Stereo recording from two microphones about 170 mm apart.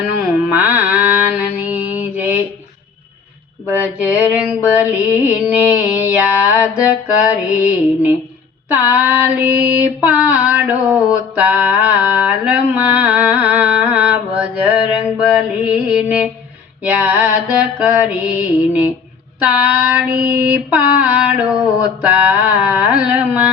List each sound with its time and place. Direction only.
0.4 s mantra: 10° right (ahead or behind)
3.7 s female singing: 10° right (ahead or behind)
15.0 s mantra: 5° right (ahead or behind)
16.8 s female singing: 10° right (ahead or behind)